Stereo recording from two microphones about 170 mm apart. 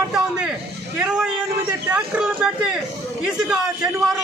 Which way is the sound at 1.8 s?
5° right (ahead or behind).